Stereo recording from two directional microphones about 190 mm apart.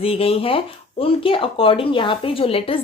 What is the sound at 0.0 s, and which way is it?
Speech, 30° left (ahead or behind).